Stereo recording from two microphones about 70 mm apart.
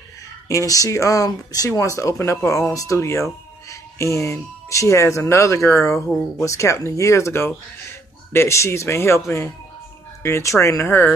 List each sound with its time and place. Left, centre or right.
0.5 s speech: left
1.7 s speech: left